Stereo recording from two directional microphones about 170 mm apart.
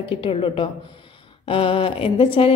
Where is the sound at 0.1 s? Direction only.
30° left (ahead or behind).